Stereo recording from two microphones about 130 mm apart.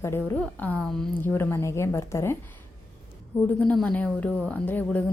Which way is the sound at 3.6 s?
5° left (ahead or behind).